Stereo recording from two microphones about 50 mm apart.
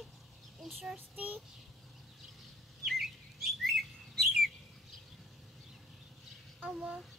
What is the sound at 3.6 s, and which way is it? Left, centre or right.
Bird, centre.